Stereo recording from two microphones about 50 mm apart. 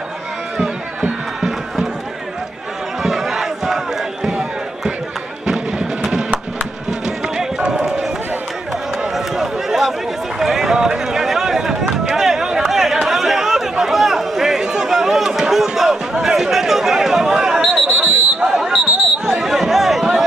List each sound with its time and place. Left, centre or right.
3.0 s crowd: centre
4.3 s a sound: centre
5.5 s music: centre
6.9 s run: centre
9.1 s a sound: centre
10.4 s run: centre
12.2 s chatter: centre